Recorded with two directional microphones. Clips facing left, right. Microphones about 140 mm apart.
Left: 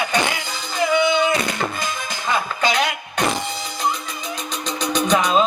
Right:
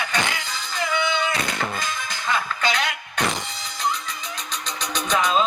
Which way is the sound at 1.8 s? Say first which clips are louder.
Left 3 dB; 15° left (ahead or behind).